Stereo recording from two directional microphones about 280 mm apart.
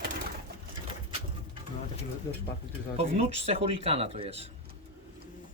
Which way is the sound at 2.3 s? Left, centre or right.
Centre.